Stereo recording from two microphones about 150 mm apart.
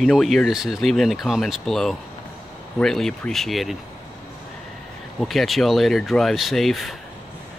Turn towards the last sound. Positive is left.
turn(degrees=0)  # may be behind; listen again after turning